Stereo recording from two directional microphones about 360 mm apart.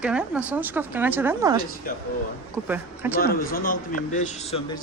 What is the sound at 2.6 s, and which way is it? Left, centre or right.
Speech, centre.